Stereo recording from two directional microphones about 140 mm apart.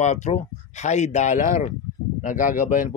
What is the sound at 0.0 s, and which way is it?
Speech, 55° left (ahead or behind).